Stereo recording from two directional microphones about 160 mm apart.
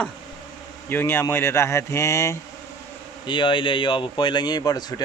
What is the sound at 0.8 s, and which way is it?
A man's voice, 15° left (ahead or behind).